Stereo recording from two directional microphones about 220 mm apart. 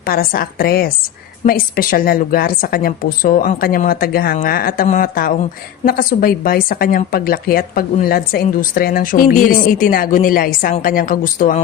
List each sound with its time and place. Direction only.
0.1 s a woman's voice: 40° left (ahead or behind)